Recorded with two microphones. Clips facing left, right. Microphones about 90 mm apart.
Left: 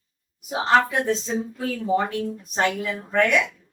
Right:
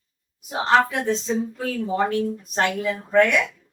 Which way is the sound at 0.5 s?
Centre (ahead or behind).